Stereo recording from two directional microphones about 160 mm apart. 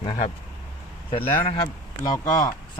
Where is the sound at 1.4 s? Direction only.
30° left (ahead or behind).